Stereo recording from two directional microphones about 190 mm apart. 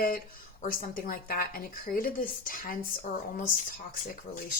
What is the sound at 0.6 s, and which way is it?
Speech, 50° left (ahead or behind).